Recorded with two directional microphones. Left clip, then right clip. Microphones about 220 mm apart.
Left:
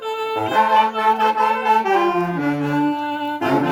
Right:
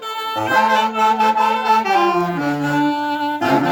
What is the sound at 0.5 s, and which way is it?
Music, 50° right (ahead or behind).